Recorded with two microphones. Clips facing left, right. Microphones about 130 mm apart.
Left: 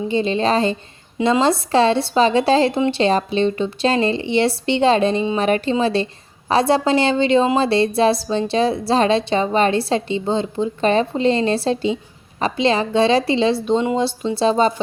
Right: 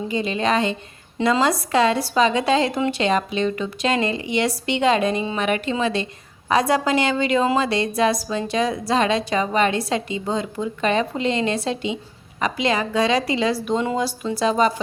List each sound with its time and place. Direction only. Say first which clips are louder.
0.1 s a woman's voice: left 3 dB; 30° left (ahead or behind)